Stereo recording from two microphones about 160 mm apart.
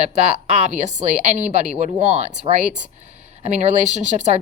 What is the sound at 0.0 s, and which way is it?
Speech, 45° right (ahead or behind).